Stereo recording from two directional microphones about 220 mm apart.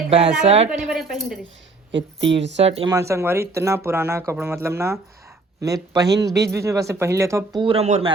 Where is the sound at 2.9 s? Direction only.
15° right (ahead or behind).